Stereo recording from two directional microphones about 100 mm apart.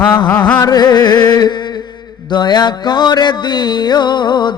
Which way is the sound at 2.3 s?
45° left (ahead or behind).